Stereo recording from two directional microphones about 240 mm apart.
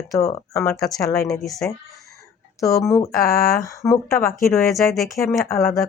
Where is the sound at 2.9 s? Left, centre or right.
Centre.